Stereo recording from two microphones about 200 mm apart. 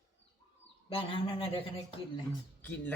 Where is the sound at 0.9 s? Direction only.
25° left (ahead or behind).